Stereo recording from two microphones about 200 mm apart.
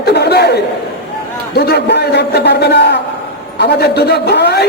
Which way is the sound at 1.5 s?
55° left (ahead or behind).